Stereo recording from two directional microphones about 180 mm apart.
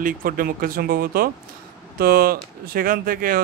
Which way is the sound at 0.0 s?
55° right (ahead or behind).